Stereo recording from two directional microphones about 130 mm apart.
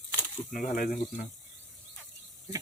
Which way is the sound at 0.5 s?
90° left.